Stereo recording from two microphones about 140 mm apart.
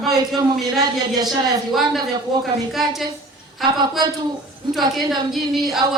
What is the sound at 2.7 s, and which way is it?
Speech, centre (ahead or behind).